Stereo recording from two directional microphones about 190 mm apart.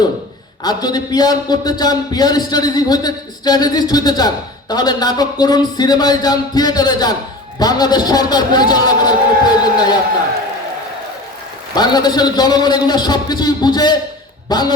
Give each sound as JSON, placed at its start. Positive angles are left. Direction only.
{"t": 0.6, "sound": "a man's voice", "side_deg": 20}
{"t": 11.7, "sound": "a man's voice", "side_deg": 20}